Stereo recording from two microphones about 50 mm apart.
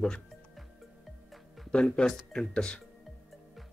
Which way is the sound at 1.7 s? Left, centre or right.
Left.